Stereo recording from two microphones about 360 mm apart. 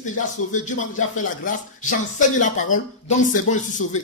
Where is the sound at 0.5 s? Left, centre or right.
Left.